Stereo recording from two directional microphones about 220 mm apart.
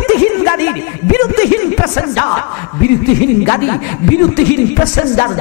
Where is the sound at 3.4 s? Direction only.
15° left (ahead or behind).